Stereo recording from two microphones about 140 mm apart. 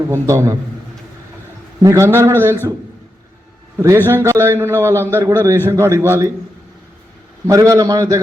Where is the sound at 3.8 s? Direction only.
20° right (ahead or behind).